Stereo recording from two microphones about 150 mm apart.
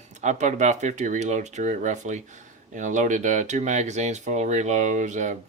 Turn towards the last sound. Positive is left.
turn(degrees=-55)  # may be behind; listen again after turning